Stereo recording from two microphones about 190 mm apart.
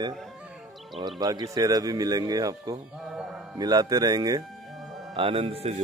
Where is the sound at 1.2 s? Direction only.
20° right (ahead or behind).